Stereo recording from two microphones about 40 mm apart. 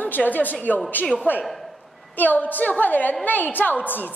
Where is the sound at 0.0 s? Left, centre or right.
Left.